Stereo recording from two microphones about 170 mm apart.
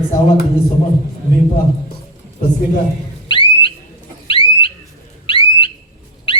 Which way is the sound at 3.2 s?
30° left (ahead or behind).